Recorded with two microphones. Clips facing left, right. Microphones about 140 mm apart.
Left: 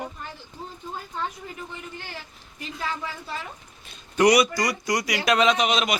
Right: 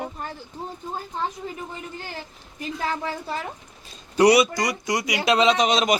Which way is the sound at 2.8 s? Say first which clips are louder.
Right 4 dB; 50° right (ahead or behind).